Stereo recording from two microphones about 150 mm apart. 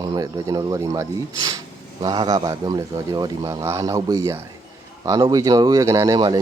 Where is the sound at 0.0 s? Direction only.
25° right (ahead or behind).